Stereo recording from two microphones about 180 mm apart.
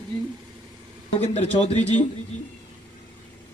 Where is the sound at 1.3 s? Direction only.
35° left (ahead or behind).